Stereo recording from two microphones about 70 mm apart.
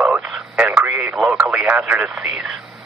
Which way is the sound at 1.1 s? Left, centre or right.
Centre.